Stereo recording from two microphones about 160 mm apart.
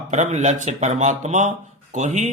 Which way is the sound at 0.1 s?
50° right (ahead or behind).